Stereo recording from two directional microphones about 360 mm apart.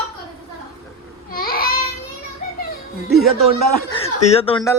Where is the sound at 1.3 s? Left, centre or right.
Left.